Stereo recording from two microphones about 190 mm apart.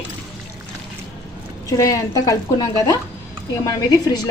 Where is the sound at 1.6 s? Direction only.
15° left (ahead or behind).